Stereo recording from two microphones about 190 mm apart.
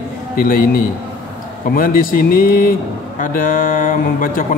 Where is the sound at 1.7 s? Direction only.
45° left (ahead or behind).